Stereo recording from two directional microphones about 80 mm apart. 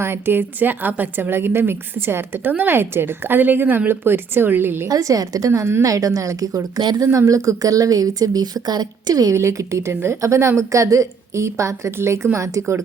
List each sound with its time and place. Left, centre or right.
0.0 s a woman's voice: right
4.9 s speech: right
5.5 s speech: right
6.7 s speech: right
7.0 s speech: right
9.3 s a woman's voice: right